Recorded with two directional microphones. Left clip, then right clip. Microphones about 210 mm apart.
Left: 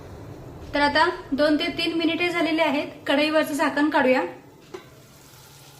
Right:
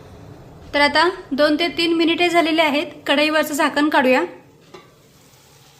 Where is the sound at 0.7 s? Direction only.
50° right (ahead or behind).